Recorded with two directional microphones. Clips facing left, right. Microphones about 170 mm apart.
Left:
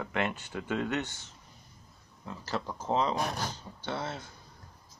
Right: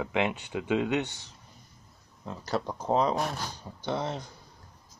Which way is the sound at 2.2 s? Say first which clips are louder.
Right 4 dB; 5° right (ahead or behind).